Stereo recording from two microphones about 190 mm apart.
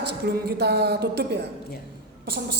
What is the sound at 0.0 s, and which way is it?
A woman's voice, 60° right (ahead or behind).